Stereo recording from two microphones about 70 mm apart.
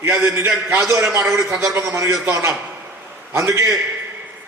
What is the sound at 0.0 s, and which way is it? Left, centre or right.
A man's voice, right.